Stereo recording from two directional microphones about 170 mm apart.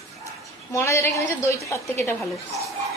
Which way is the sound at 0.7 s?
15° left (ahead or behind).